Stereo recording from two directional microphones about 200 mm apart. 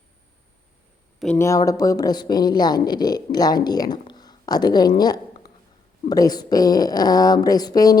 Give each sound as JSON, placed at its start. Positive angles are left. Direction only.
{"t": 1.4, "sound": "speech", "side_deg": 15}